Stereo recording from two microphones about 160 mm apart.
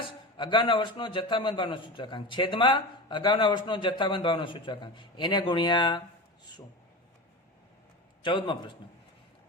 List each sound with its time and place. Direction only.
0.3 s a man's voice: 30° left (ahead or behind)
8.2 s a man's voice: 30° left (ahead or behind)